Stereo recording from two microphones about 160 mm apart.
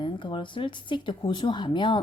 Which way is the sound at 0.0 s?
30° left (ahead or behind).